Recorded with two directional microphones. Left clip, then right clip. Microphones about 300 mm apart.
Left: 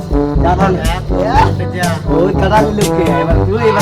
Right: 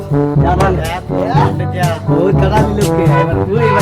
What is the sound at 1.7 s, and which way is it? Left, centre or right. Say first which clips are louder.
Music: left 2 dB; centre.